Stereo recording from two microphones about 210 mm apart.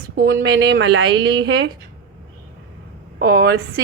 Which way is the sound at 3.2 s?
50° right (ahead or behind).